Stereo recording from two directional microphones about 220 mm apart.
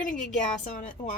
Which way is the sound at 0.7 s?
35° left (ahead or behind).